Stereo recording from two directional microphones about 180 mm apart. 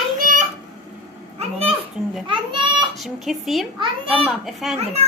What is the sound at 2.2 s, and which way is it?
Speech, 25° right (ahead or behind).